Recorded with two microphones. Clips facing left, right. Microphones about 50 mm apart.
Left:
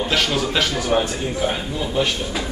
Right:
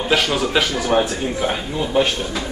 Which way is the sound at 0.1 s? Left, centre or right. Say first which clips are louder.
Right 6 dB; centre.